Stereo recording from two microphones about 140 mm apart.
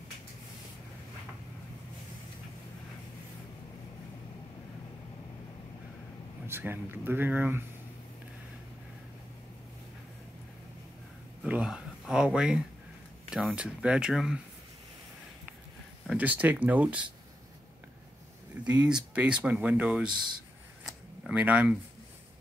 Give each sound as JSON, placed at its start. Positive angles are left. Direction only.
{"t": 6.4, "sound": "speech", "side_deg": -15}
{"t": 11.4, "sound": "speech", "side_deg": -10}
{"t": 16.1, "sound": "speech", "side_deg": -10}
{"t": 18.6, "sound": "speech", "side_deg": -10}
{"t": 20.8, "sound": "a sound", "side_deg": -5}